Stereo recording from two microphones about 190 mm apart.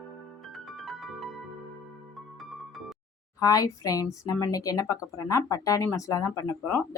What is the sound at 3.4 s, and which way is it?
A woman's voice, 20° left (ahead or behind).